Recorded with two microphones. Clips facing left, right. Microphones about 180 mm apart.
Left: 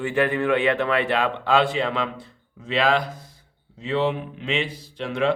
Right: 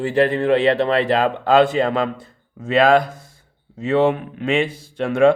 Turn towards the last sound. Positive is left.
turn(degrees=-50)  # may be behind; listen again after turning